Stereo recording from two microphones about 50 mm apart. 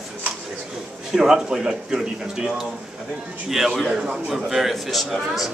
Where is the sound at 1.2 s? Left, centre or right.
Centre.